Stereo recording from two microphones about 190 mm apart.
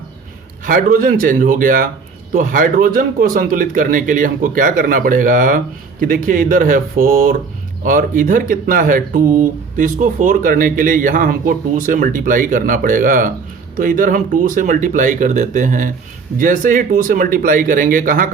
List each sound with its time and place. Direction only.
0.6 s speech: 45° right (ahead or behind)